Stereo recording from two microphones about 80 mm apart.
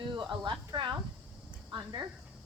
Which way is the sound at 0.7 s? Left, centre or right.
Right.